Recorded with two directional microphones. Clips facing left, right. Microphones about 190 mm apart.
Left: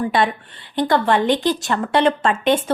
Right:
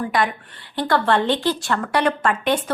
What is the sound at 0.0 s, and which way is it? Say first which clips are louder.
A woman's voice: left 3 dB; 25° left (ahead or behind).